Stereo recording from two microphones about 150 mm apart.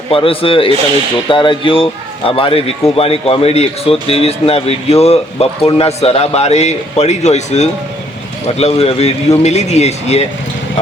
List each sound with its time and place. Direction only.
0.1 s speech: 35° left (ahead or behind)